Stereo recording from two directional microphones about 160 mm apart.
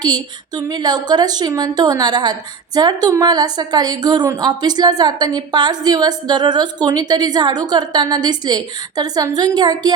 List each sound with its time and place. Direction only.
0.0 s a woman's voice: 25° right (ahead or behind)